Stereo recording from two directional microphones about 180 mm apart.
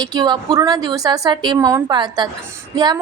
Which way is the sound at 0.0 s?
20° right (ahead or behind).